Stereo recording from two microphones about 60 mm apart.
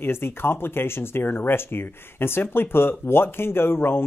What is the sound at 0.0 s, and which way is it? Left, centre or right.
Speech, left.